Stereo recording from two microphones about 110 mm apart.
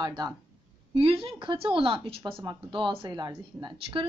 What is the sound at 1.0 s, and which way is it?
A woman's voice, 55° right (ahead or behind).